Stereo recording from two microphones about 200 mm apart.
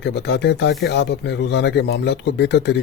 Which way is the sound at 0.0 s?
55° left (ahead or behind).